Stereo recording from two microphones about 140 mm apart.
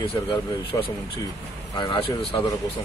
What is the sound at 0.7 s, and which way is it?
Speech, 20° left (ahead or behind).